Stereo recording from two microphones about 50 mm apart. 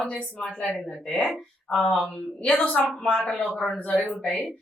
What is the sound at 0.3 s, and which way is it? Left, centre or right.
A woman's voice, left.